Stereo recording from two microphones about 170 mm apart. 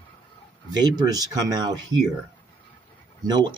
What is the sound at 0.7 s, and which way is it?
Speech, 25° right (ahead or behind).